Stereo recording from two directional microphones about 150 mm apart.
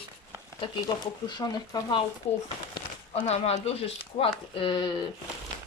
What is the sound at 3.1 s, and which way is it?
Speech, 45° left (ahead or behind).